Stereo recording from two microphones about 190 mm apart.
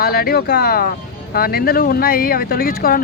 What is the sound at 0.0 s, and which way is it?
Speech, 55° left (ahead or behind).